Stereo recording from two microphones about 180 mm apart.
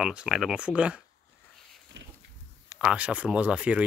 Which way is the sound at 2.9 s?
5° right (ahead or behind).